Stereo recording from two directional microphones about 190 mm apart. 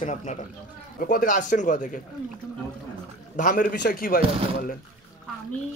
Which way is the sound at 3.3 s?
45° left (ahead or behind).